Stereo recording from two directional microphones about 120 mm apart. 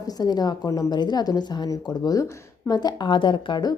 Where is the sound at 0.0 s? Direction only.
35° left (ahead or behind).